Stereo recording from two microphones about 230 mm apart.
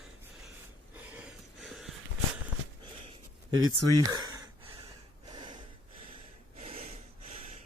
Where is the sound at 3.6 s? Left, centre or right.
Right.